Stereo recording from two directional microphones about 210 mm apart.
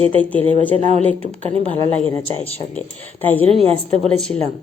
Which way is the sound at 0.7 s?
30° right (ahead or behind).